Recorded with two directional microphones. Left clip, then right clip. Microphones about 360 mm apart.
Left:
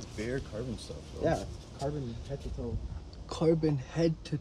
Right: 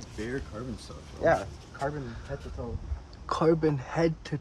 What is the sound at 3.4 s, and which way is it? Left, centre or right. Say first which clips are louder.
Speech: right 3 dB; centre.